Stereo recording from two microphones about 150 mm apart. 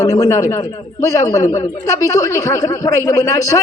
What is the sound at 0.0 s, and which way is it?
A man's voice, 20° left (ahead or behind).